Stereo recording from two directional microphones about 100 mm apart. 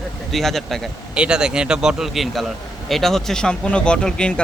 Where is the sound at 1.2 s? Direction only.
10° right (ahead or behind).